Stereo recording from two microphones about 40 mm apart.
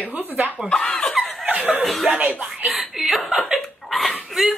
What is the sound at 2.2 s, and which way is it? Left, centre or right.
Speech, right.